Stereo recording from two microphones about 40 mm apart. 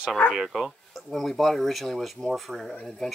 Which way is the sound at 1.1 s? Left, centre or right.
Centre.